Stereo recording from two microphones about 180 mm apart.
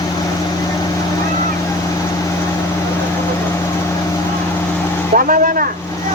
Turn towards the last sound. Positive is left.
turn(degrees=-50)  # may be behind; listen again after turning